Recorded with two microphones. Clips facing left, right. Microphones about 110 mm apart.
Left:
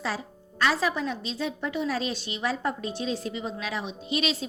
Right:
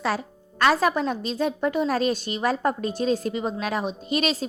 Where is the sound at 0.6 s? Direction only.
50° right (ahead or behind).